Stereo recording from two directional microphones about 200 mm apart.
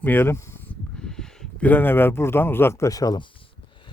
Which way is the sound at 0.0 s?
10° left (ahead or behind).